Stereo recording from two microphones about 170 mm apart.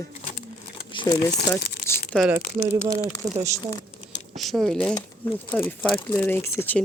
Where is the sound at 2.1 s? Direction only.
5° left (ahead or behind).